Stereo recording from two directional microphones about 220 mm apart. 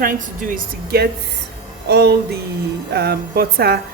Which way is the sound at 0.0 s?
40° right (ahead or behind).